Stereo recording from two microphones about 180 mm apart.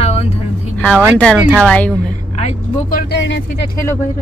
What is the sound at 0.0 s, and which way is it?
Vehicle, 35° left (ahead or behind).